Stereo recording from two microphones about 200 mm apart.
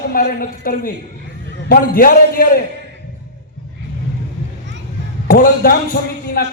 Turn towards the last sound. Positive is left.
turn(degrees=45)  # may be behind; listen again after turning